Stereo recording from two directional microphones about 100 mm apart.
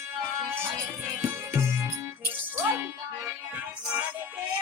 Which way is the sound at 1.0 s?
30° right (ahead or behind).